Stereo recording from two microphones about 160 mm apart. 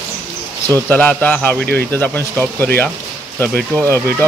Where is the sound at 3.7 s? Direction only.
20° right (ahead or behind).